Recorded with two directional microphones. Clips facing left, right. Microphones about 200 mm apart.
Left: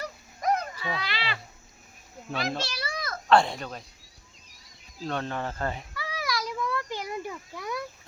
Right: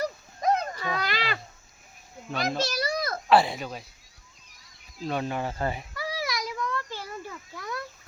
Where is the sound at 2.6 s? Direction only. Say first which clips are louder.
Right 6 dB; 40° right (ahead or behind).